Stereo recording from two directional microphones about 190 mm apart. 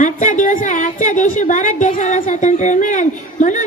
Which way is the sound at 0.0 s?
45° left (ahead or behind).